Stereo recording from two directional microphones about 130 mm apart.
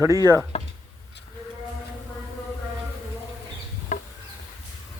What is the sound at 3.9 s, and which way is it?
Insect, 70° left (ahead or behind).